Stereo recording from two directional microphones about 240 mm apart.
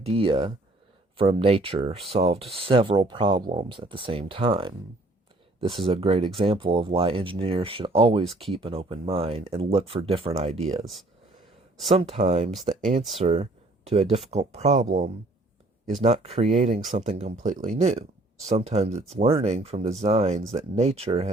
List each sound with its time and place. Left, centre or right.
0.0 s speech: right
11.9 s speech: right
16.0 s speech: right